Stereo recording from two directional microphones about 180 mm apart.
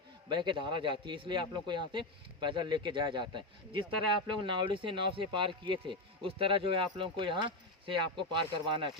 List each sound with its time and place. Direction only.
0.3 s speech: 25° right (ahead or behind)